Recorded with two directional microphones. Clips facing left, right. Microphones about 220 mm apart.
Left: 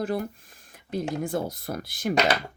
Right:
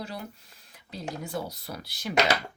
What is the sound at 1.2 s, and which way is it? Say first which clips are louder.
Speech: left 6 dB; 50° left (ahead or behind).